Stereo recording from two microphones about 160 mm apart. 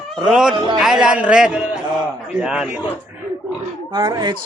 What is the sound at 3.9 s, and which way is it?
Speech, 25° right (ahead or behind).